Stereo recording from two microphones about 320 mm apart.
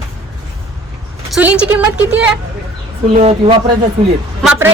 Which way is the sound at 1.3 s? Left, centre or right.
Centre.